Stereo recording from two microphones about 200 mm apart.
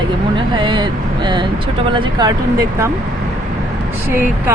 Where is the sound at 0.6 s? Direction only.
25° right (ahead or behind).